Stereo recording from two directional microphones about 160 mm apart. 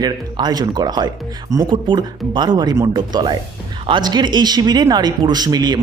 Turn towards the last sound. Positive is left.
turn(degrees=-25)  # may be behind; listen again after turning